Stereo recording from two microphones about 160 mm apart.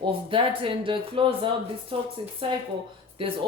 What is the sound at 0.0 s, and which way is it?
Speech, 30° right (ahead or behind).